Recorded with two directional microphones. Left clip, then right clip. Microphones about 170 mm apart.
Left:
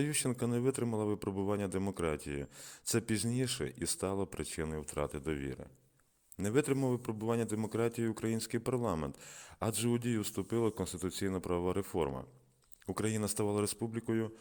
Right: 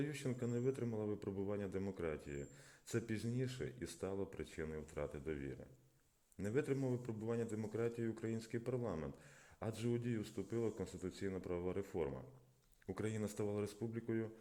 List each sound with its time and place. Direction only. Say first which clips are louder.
0.0 s speech: left 8 dB; 35° left (ahead or behind)